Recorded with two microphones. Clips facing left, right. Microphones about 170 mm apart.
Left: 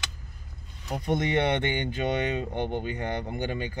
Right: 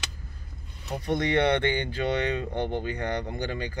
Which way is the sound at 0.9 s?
20° left (ahead or behind).